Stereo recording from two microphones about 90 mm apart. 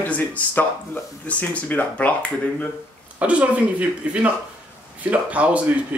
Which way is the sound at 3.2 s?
15° right (ahead or behind).